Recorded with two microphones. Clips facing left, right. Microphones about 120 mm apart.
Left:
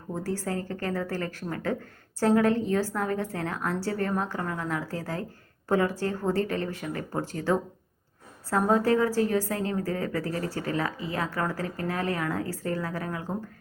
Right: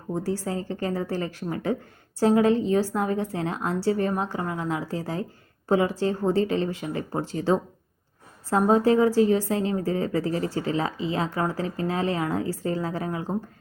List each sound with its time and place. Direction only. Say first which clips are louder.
0.1 s a woman's voice: right 3 dB; 15° right (ahead or behind)